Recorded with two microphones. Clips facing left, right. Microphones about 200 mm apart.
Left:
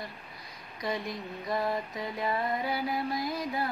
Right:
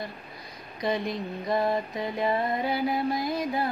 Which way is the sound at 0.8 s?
25° right (ahead or behind).